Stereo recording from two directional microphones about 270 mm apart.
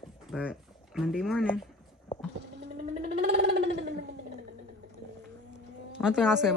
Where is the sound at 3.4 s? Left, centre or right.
Right.